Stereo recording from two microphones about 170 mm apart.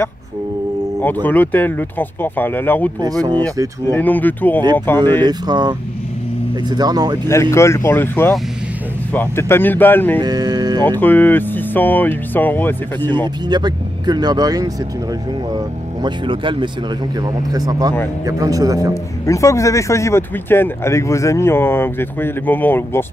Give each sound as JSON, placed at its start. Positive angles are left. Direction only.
{"t": 1.0, "sound": "speech", "side_deg": 10}
{"t": 3.0, "sound": "speech", "side_deg": -20}
{"t": 3.9, "sound": "speech", "side_deg": 10}
{"t": 5.2, "sound": "speech", "side_deg": -25}
{"t": 7.2, "sound": "speech", "side_deg": 15}
{"t": 10.2, "sound": "a sound", "side_deg": -25}
{"t": 10.9, "sound": "speech", "side_deg": 10}
{"t": 13.5, "sound": "speech", "side_deg": -25}
{"t": 19.2, "sound": "speech", "side_deg": 20}